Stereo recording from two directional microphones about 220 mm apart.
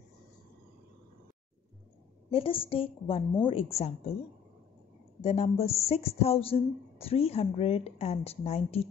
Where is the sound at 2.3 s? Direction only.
25° left (ahead or behind).